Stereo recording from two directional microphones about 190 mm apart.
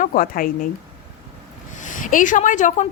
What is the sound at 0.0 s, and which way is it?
Speech, 45° left (ahead or behind).